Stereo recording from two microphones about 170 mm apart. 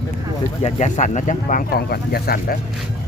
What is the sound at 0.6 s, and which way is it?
Speech, 45° left (ahead or behind).